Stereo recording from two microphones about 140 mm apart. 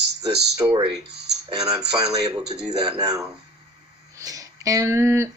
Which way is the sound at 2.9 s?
25° right (ahead or behind).